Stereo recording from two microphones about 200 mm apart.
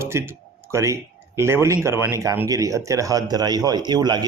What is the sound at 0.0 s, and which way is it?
Speech, 15° right (ahead or behind).